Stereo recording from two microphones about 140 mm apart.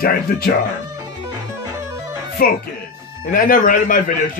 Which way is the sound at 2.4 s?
90° left.